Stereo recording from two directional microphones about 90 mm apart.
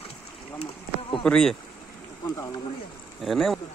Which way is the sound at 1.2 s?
5° left (ahead or behind).